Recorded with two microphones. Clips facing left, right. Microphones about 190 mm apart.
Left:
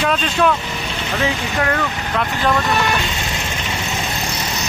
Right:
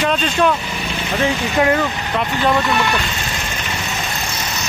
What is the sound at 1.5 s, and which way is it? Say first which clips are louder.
Speech: right 7 dB; 20° right (ahead or behind).